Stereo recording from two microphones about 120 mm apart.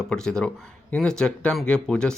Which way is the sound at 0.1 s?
5° left (ahead or behind).